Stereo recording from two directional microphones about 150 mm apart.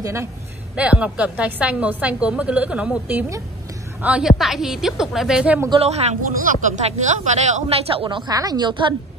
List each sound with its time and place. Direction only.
0.0 s a woman's voice: 20° right (ahead or behind)
0.7 s a woman's voice: 10° right (ahead or behind)
5.8 s a man's voice: 45° right (ahead or behind)
6.2 s speech: 60° right (ahead or behind); by 8.9 s 30° right (ahead or behind)